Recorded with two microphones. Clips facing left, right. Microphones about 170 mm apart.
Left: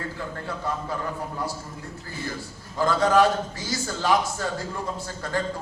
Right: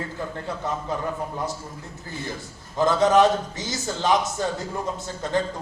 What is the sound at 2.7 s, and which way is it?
A man's voice, 20° right (ahead or behind).